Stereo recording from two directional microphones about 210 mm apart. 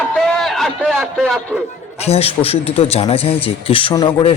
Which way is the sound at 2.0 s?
30° left (ahead or behind).